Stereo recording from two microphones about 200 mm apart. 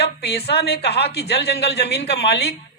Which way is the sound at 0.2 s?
55° left (ahead or behind).